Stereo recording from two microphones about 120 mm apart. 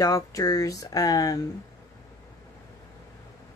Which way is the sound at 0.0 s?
30° left (ahead or behind).